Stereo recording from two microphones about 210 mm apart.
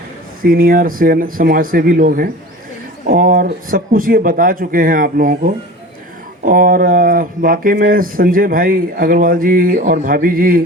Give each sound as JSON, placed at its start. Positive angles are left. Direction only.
{"t": 0.4, "sound": "speech", "side_deg": -45}